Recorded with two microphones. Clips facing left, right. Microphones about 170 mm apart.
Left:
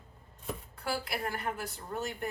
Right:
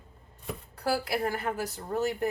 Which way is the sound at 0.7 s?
40° right (ahead or behind).